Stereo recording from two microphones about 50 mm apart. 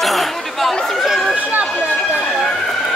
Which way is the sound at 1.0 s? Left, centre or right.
Centre.